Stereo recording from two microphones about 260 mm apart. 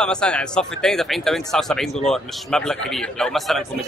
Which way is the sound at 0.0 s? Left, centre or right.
Centre.